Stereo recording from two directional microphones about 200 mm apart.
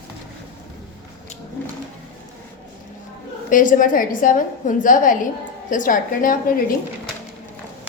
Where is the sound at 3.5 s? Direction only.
40° left (ahead or behind).